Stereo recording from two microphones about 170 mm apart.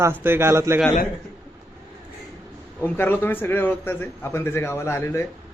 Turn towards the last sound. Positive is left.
turn(degrees=15)  # may be behind; listen again after turning